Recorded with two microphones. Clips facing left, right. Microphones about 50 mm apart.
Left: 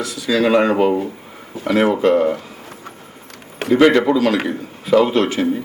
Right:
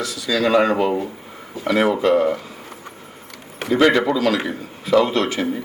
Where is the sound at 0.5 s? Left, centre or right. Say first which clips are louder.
Left 1 dB; centre.